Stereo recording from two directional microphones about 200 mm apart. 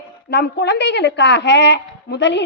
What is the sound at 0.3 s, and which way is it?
Speech, 55° left (ahead or behind).